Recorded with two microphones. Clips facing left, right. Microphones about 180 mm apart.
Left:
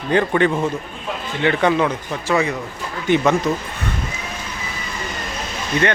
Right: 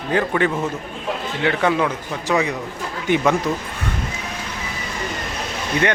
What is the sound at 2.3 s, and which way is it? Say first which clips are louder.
Speech: left 1 dB; 15° right (ahead or behind).